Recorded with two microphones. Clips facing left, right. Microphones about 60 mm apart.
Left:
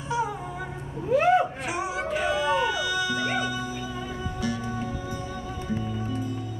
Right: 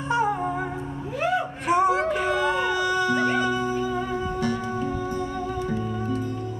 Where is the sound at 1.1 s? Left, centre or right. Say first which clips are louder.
Left 5 dB; left.